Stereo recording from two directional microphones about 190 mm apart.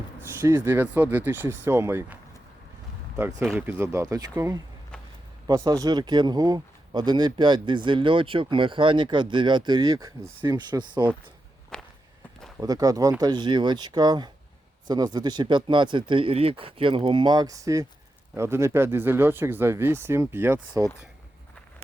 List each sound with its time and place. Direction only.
0.4 s speech: 15° right (ahead or behind)
3.2 s speech: 15° right (ahead or behind)
11.7 s walk: 5° left (ahead or behind)
12.5 s speech: 20° right (ahead or behind)